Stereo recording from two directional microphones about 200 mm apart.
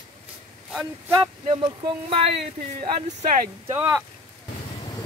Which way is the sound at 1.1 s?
20° right (ahead or behind).